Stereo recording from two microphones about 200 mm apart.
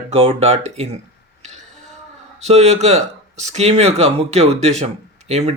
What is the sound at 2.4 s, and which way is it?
Speech, 35° right (ahead or behind).